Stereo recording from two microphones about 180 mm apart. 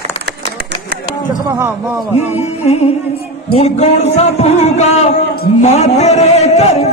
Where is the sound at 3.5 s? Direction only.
35° left (ahead or behind).